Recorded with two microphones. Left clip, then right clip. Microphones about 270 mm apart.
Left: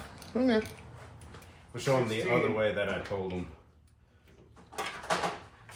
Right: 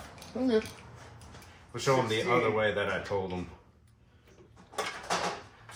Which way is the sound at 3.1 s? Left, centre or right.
Centre.